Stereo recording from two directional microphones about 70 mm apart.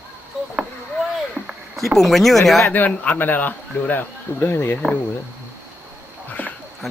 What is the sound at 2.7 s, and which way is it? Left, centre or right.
A man's voice, left.